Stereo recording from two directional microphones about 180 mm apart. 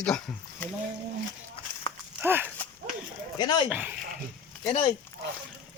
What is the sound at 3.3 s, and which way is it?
Speech, 25° left (ahead or behind).